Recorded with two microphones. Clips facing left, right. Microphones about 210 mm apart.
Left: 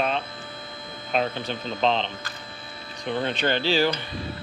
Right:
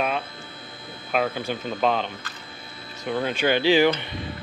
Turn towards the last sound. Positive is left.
turn(degrees=-15)  # may be behind; listen again after turning